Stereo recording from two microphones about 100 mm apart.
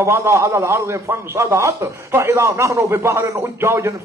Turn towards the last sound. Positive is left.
turn(degrees=-30)  # may be behind; listen again after turning